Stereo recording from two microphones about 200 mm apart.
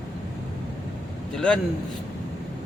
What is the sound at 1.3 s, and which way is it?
Speech, 5° left (ahead or behind).